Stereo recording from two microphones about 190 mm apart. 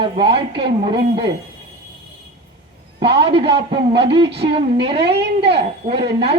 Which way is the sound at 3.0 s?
30° right (ahead or behind).